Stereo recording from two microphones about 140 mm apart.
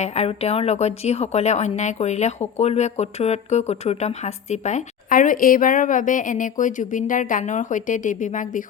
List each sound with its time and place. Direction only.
0.0 s speech: 50° left (ahead or behind); by 8.6 s 65° left (ahead or behind)